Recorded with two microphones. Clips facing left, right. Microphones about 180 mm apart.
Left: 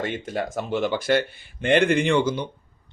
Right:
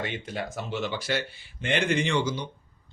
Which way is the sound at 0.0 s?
45° left (ahead or behind).